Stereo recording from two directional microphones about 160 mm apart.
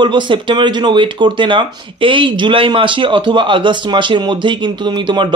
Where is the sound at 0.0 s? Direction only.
30° right (ahead or behind).